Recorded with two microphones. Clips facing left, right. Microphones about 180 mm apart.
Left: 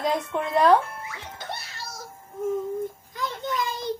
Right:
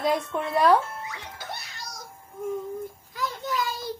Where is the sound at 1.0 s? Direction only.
15° right (ahead or behind).